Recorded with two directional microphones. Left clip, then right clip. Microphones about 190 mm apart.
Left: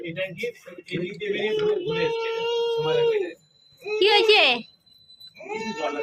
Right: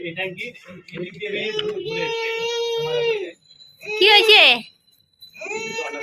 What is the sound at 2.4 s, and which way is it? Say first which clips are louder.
Speech: left 1 dB; 15° left (ahead or behind).